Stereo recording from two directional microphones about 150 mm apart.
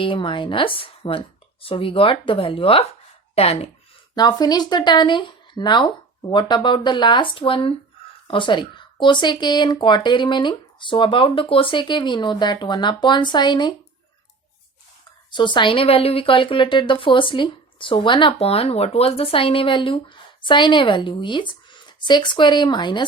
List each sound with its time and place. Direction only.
0.0 s speech: 35° left (ahead or behind)
4.1 s speech: 30° left (ahead or behind)
15.3 s speech: 30° left (ahead or behind)